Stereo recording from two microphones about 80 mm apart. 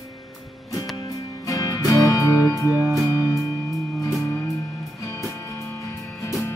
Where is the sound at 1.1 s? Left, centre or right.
Left.